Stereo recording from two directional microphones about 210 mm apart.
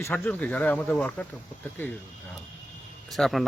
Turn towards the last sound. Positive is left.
turn(degrees=0)  # may be behind; listen again after turning